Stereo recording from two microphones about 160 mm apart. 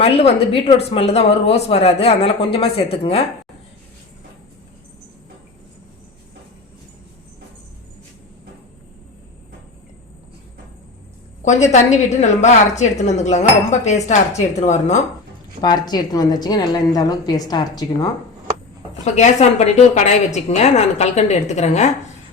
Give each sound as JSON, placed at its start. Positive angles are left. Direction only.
{"t": 0.0, "sound": "speech", "side_deg": 35}
{"t": 11.4, "sound": "a woman's voice", "side_deg": 45}
{"t": 15.6, "sound": "a woman's voice", "side_deg": 25}
{"t": 19.0, "sound": "a woman's voice", "side_deg": 45}